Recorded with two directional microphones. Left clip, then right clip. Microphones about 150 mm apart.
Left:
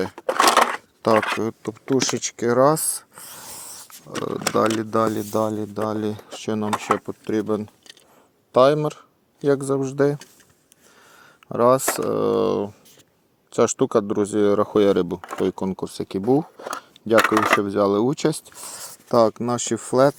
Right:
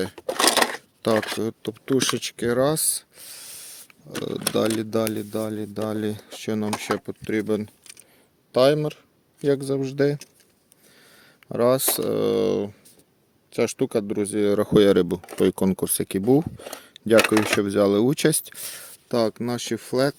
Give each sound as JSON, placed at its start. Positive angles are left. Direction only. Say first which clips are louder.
{"t": 0.2, "sound": "a sound", "louder": "left 4 dB", "side_deg": -5}
{"t": 1.1, "sound": "speech", "louder": "left 5 dB", "side_deg": -15}
{"t": 4.1, "sound": "speech", "louder": "left 3 dB", "side_deg": -20}
{"t": 5.1, "sound": "speech", "louder": "left 5 dB", "side_deg": -10}
{"t": 8.5, "sound": "speech", "louder": "left 3 dB", "side_deg": -10}
{"t": 11.4, "sound": "speech", "louder": "left 3 dB", "side_deg": -10}
{"t": 12.5, "sound": "speech", "louder": "left 1 dB", "side_deg": -30}
{"t": 13.5, "sound": "speech", "louder": "left 4 dB", "side_deg": 0}
{"t": 14.7, "sound": "speech", "louder": "right 1 dB", "side_deg": -40}
{"t": 17.6, "sound": "speech", "louder": "even", "side_deg": -45}
{"t": 18.6, "sound": "a sound", "louder": "left 1 dB", "side_deg": -20}
{"t": 19.1, "sound": "speech", "louder": "left 6 dB", "side_deg": 5}